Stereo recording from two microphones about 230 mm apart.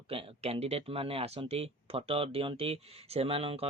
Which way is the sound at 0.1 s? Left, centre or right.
Right.